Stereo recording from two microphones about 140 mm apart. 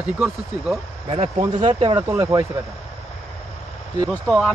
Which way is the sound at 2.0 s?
25° right (ahead or behind).